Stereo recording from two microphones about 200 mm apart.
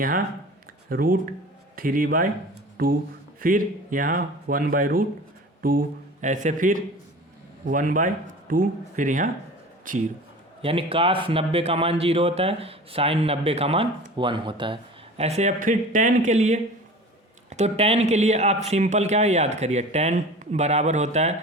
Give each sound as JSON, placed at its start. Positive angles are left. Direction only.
{"t": 0.9, "sound": "a man's voice", "side_deg": -45}
{"t": 6.2, "sound": "a man's voice", "side_deg": -40}
{"t": 10.6, "sound": "a man's voice", "side_deg": -30}